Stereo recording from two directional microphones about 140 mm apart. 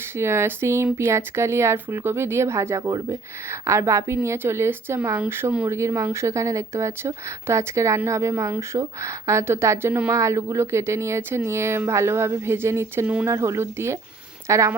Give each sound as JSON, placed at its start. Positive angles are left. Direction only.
{"t": 0.2, "sound": "a woman's voice", "side_deg": -20}